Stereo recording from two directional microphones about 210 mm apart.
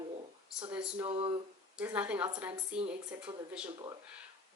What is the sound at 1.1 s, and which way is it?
Speech, 25° right (ahead or behind).